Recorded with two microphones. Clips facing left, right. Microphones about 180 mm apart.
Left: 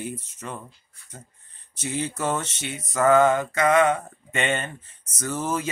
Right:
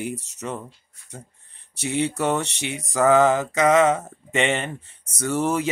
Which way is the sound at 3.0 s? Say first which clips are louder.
Right 1 dB; 20° right (ahead or behind).